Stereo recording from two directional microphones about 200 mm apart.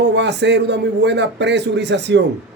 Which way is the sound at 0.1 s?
60° right (ahead or behind).